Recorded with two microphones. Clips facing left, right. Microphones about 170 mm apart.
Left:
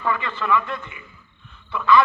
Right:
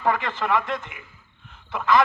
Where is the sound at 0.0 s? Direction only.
80° right.